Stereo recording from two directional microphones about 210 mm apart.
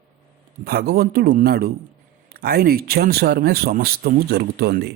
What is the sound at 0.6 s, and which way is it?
A man's voice, 45° right (ahead or behind).